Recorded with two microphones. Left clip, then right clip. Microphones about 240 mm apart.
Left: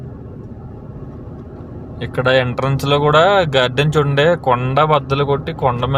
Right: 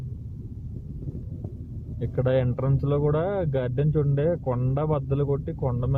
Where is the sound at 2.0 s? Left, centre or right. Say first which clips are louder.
Left 10 dB; centre.